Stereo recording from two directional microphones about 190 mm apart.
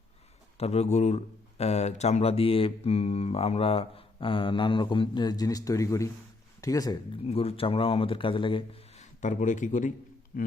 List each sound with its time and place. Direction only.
0.5 s speech: 35° left (ahead or behind)
7.3 s speech: 30° left (ahead or behind); by 10.5 s 45° left (ahead or behind)